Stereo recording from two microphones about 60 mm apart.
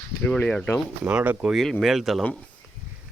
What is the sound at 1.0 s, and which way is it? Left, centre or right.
Speech, right.